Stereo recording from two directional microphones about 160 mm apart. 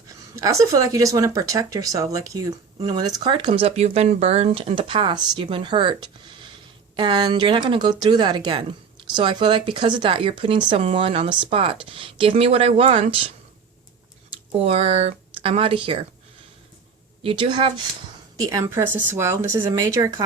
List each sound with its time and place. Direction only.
0.3 s speech: 20° right (ahead or behind)
14.6 s speech: 40° right (ahead or behind)
17.2 s speech: 35° right (ahead or behind)
18.3 s speech: 20° right (ahead or behind)